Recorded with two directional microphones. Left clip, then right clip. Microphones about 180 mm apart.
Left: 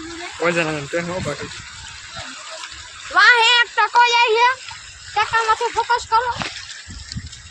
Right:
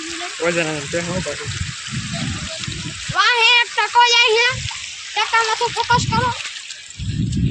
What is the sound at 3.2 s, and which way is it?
Speech, 35° left (ahead or behind).